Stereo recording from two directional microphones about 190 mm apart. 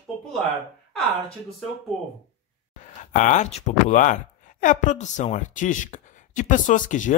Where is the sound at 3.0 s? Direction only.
40° left (ahead or behind).